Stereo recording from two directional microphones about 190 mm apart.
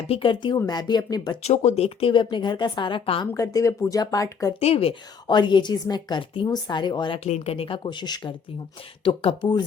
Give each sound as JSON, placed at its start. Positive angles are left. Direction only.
{"t": 0.1, "sound": "a woman's voice", "side_deg": 25}
{"t": 1.4, "sound": "a woman's voice", "side_deg": 35}
{"t": 4.6, "sound": "a woman's voice", "side_deg": 30}
{"t": 7.3, "sound": "a woman's voice", "side_deg": 35}